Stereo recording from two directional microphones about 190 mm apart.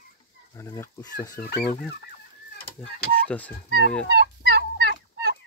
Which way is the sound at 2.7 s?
5° left (ahead or behind).